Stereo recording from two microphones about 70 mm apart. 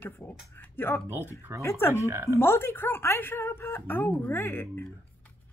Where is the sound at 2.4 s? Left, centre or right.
Left.